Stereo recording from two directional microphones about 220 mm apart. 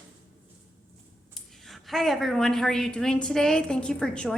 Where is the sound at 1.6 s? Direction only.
Centre (ahead or behind).